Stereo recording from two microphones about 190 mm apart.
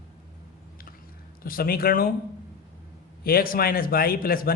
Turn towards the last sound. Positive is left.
turn(degrees=50)  # may be behind; listen again after turning